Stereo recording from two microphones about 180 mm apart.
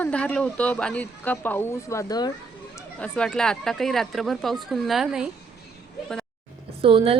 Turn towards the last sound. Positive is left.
turn(degrees=-30)  # may be behind; listen again after turning